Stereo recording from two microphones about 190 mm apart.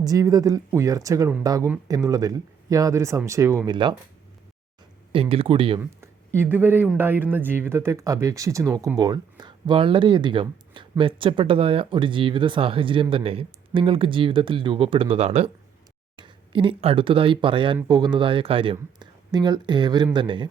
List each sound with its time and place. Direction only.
0.0 s speech: 20° right (ahead or behind)
5.1 s speech: 30° right (ahead or behind)
5.8 s speech: 10° right (ahead or behind)